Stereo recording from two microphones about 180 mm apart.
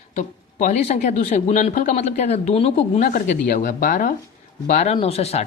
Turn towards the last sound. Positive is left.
turn(degrees=35)  # may be behind; listen again after turning